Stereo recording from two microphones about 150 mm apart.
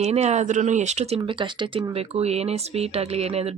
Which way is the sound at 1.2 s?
35° right (ahead or behind).